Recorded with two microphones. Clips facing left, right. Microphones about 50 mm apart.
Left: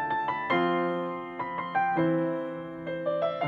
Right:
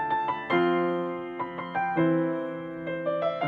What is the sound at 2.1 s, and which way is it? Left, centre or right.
Music, right.